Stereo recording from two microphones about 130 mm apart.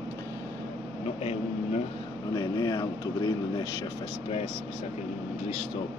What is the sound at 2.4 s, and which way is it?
Speech, 30° left (ahead or behind).